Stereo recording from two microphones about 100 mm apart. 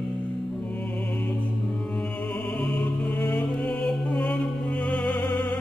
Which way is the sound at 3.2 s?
20° left (ahead or behind).